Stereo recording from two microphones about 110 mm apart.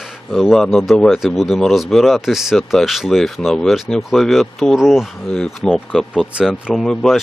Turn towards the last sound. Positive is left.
turn(degrees=0)  # may be behind; listen again after turning